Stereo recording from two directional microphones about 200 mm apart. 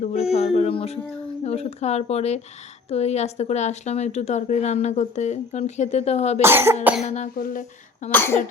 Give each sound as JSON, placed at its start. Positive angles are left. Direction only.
{"t": 0.0, "sound": "speech", "side_deg": 35}
{"t": 6.4, "sound": "cough", "side_deg": -10}
{"t": 7.0, "sound": "speech", "side_deg": 35}
{"t": 8.1, "sound": "speech", "side_deg": 10}